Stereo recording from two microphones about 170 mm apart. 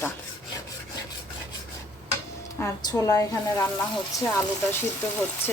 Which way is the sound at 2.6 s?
20° left (ahead or behind).